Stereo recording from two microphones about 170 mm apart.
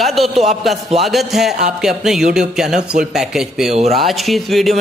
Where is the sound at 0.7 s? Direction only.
Centre (ahead or behind).